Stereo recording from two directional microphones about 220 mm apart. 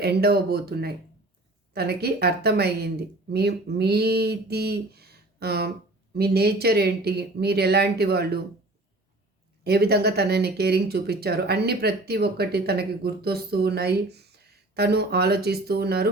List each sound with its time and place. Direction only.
0.0 s speech: 45° right (ahead or behind)
9.6 s speech: 45° right (ahead or behind)